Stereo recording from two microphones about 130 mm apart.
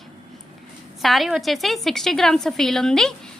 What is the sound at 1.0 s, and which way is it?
A woman's voice, centre (ahead or behind).